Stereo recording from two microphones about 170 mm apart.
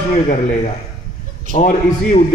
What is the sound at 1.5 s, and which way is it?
Speech, 45° left (ahead or behind).